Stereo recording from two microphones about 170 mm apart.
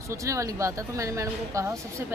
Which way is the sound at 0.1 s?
20° right (ahead or behind).